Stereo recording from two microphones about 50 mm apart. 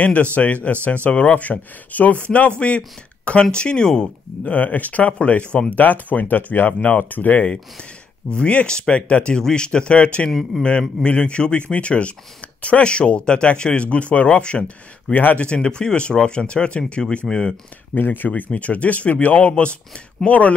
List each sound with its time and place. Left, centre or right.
0.0 s speech: left
4.4 s speech: left
10.5 s a man's voice: centre
11.1 s speech: left
17.9 s speech: left